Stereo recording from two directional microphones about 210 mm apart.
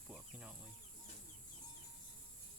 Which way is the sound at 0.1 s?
5° right (ahead or behind).